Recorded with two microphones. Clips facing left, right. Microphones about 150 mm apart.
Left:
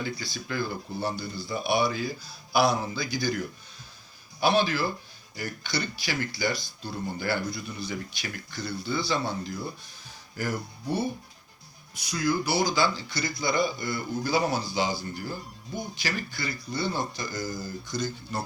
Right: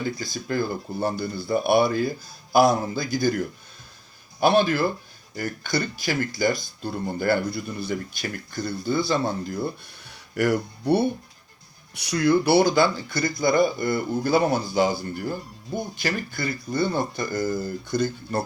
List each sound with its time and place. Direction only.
0.0 s speech: 45° right (ahead or behind)